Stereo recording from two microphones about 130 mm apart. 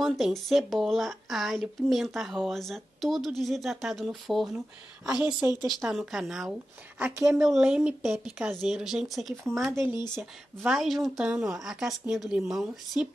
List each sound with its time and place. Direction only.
0.0 s speech: centre (ahead or behind)
5.1 s a woman's voice: 10° right (ahead or behind)
9.7 s speech: 20° right (ahead or behind)
10.6 s speech: centre (ahead or behind)